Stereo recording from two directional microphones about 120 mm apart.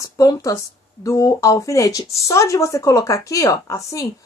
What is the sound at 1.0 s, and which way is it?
Speech, 25° left (ahead or behind).